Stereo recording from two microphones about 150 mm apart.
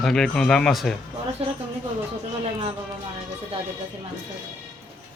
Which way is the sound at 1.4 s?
45° right (ahead or behind).